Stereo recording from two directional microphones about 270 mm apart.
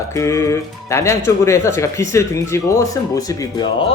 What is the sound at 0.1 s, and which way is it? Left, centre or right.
Speech, centre.